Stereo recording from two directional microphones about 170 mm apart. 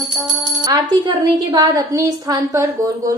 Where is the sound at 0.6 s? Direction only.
25° right (ahead or behind).